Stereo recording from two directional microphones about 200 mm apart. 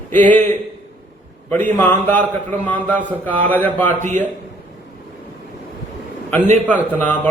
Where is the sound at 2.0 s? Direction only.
10° left (ahead or behind).